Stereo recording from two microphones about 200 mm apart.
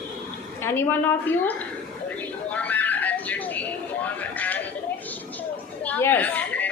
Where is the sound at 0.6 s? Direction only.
10° left (ahead or behind).